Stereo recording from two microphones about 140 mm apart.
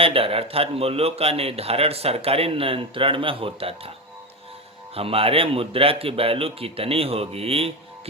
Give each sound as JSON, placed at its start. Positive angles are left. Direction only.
{"t": 0.0, "sound": "a man's voice", "side_deg": -40}
{"t": 4.9, "sound": "a man's voice", "side_deg": -45}